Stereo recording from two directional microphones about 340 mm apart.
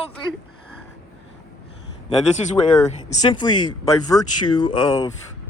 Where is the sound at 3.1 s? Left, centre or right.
Centre.